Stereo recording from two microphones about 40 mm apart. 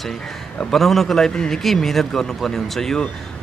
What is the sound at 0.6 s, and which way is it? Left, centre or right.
Speech, centre.